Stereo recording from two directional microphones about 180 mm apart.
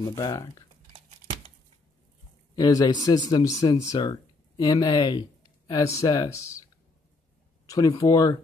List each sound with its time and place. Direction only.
0.0 s speech: 20° left (ahead or behind)
2.5 s speech: 20° left (ahead or behind)
7.6 s speech: 20° left (ahead or behind)